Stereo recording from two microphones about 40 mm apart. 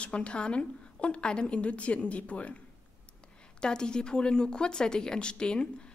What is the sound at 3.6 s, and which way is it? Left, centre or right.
A woman's voice, left.